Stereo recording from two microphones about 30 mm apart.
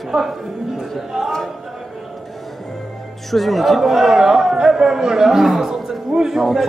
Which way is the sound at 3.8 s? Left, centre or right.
Centre.